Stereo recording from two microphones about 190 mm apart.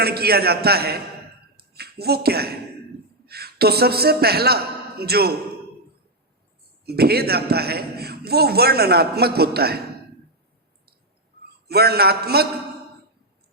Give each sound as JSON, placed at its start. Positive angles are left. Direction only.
{"t": 0.0, "sound": "a man's voice", "side_deg": -55}
{"t": 6.8, "sound": "a man's voice", "side_deg": -55}
{"t": 11.7, "sound": "a man's voice", "side_deg": -55}